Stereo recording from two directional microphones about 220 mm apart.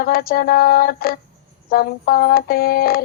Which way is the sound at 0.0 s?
40° left (ahead or behind).